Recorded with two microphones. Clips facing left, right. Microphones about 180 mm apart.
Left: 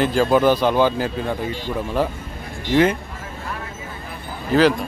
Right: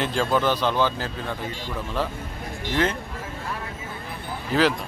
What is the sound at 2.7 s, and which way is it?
Speech, 10° left (ahead or behind).